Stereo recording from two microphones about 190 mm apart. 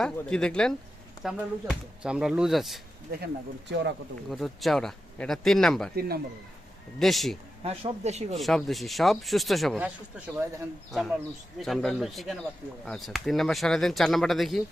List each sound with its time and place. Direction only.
0.0 s speech: 5° left (ahead or behind)
3.1 s speech: 55° right (ahead or behind)
4.3 s speech: centre (ahead or behind)
7.0 s speech: centre (ahead or behind)
7.6 s speech: 35° right (ahead or behind)
8.4 s speech: centre (ahead or behind)